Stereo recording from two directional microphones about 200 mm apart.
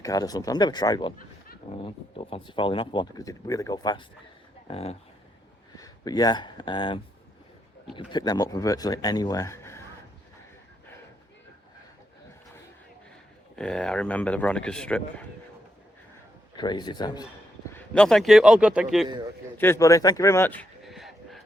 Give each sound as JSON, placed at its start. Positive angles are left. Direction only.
{"t": 0.0, "sound": "speech", "side_deg": 20}
{"t": 5.7, "sound": "speech", "side_deg": 20}
{"t": 13.6, "sound": "a man's voice", "side_deg": 5}
{"t": 16.6, "sound": "speech", "side_deg": 20}
{"t": 17.7, "sound": "a man's voice", "side_deg": 5}
{"t": 19.5, "sound": "speech", "side_deg": 10}